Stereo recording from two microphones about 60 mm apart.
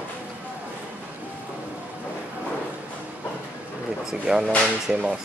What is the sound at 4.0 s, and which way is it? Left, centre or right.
Speech, centre.